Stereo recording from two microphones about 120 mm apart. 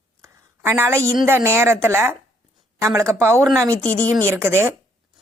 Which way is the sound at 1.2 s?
20° right (ahead or behind).